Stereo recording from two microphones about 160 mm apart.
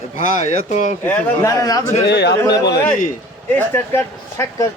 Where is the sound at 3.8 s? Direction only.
15° left (ahead or behind).